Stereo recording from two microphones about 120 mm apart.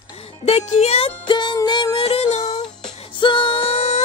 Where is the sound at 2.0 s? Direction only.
60° left (ahead or behind).